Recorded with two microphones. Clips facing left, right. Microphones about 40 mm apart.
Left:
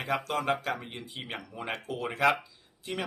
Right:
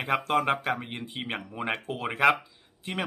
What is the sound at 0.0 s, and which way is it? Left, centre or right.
Speech, right.